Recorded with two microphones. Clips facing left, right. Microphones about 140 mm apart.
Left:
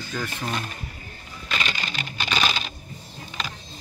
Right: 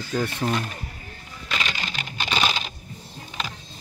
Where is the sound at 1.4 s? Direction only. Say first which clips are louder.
Even; 10° right (ahead or behind).